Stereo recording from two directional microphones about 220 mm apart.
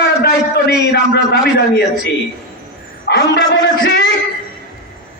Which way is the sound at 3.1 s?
50° left (ahead or behind).